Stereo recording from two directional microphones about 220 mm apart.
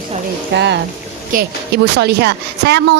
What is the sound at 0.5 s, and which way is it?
A woman's voice, 50° right (ahead or behind).